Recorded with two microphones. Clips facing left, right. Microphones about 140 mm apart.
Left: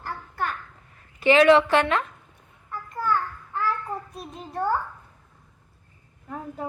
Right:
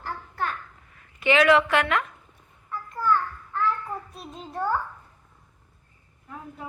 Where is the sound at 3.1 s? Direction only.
15° left (ahead or behind).